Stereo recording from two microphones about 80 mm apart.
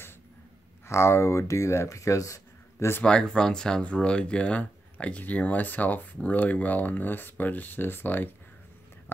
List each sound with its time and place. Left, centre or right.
0.8 s speech: left
3.0 s speech: centre